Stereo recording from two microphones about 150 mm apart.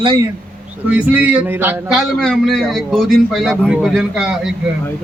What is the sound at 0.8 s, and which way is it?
Speech, 10° right (ahead or behind).